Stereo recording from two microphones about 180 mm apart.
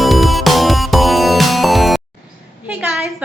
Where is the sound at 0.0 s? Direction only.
Centre (ahead or behind).